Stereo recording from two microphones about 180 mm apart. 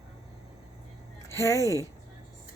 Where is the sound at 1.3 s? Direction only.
15° left (ahead or behind).